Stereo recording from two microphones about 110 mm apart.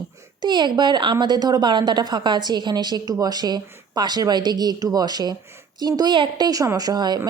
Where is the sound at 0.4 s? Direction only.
45° right (ahead or behind).